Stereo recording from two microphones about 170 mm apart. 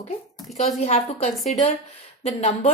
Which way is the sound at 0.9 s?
35° left (ahead or behind).